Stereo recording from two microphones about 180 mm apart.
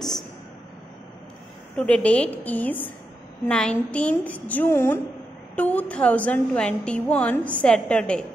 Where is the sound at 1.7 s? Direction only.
5° left (ahead or behind).